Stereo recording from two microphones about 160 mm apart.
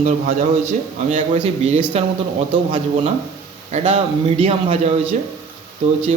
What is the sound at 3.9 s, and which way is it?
A man's voice, 40° right (ahead or behind).